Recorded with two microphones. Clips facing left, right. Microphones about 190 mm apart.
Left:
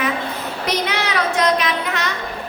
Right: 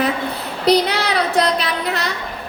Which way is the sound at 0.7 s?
35° right (ahead or behind).